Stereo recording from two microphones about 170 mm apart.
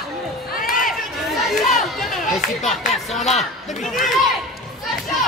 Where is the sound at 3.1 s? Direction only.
40° left (ahead or behind).